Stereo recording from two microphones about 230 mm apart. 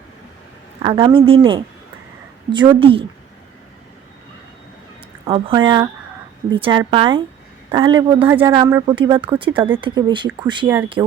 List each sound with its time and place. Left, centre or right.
0.8 s speech: right
5.2 s speech: right
8.2 s speech: centre